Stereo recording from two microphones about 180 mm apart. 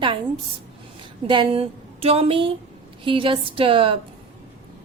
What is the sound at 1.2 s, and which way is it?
A woman's voice, 30° right (ahead or behind).